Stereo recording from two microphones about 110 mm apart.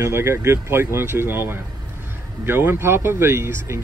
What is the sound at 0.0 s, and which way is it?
Speech, 25° right (ahead or behind).